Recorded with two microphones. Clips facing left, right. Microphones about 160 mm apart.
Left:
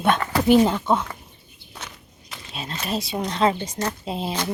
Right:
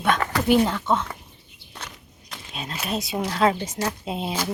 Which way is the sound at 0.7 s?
15° left (ahead or behind).